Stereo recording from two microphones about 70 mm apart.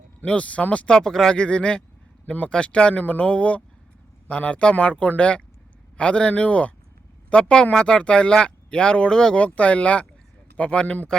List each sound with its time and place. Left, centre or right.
0.3 s speech: centre
0.9 s speech: centre